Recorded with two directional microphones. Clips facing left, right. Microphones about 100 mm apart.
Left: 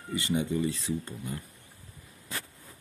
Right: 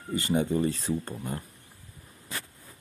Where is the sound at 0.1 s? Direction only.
45° right (ahead or behind).